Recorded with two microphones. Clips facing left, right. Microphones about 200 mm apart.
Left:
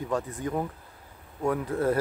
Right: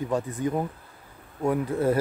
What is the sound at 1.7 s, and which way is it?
Speech, 5° right (ahead or behind).